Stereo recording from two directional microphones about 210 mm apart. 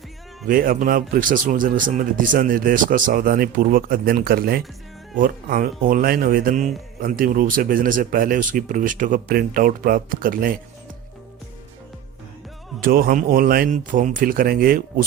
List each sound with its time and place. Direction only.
0.4 s a man's voice: 40° right (ahead or behind)
12.8 s speech: 45° right (ahead or behind)